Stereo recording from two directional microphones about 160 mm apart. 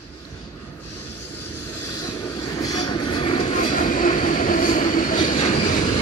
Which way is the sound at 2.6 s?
25° left (ahead or behind).